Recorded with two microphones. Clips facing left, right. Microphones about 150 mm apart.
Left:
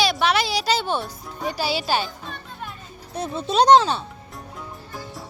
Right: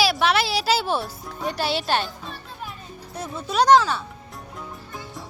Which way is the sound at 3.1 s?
25° left (ahead or behind).